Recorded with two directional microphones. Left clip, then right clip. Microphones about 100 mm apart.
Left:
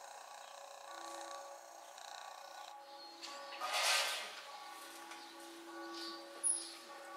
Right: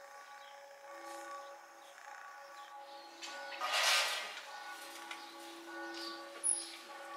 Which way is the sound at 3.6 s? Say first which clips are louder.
Right 3 dB; 10° right (ahead or behind).